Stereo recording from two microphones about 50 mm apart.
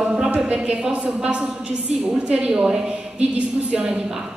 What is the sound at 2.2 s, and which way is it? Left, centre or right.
Speech, right.